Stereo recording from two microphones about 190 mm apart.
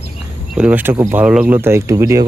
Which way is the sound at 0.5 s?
5° right (ahead or behind).